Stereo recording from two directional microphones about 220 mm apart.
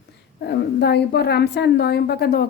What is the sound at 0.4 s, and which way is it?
A woman's voice, 50° left (ahead or behind).